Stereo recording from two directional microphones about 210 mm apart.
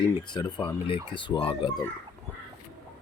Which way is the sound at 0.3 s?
20° left (ahead or behind).